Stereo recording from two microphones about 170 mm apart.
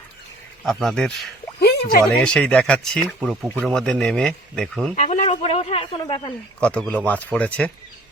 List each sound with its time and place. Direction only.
0.6 s speech: centre (ahead or behind)
1.5 s a sound: 70° left (ahead or behind)
2.2 s speech: 5° left (ahead or behind)
4.9 s speech: 45° left (ahead or behind)
6.6 s speech: 5° left (ahead or behind)